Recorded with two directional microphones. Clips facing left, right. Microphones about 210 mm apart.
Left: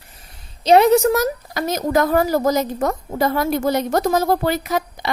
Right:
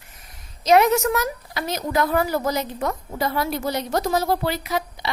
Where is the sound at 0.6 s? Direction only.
30° left (ahead or behind).